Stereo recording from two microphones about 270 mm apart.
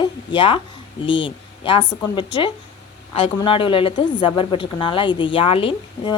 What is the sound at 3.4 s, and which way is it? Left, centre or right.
A woman's voice, centre.